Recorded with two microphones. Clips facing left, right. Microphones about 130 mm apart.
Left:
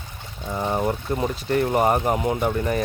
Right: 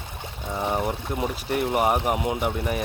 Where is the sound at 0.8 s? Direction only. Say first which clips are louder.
Left 3 dB; 10° right (ahead or behind).